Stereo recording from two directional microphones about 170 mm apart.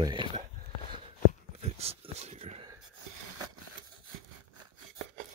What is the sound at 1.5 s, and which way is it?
Speech, 35° right (ahead or behind).